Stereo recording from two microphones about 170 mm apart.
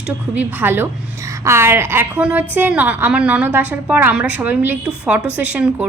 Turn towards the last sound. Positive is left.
turn(degrees=-10)  # may be behind; listen again after turning